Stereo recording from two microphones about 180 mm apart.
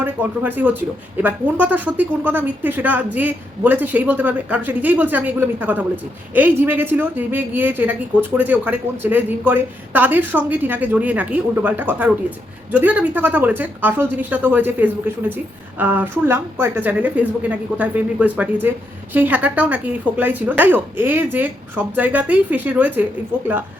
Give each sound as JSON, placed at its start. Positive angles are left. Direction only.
{"t": 0.0, "sound": "speech", "side_deg": -10}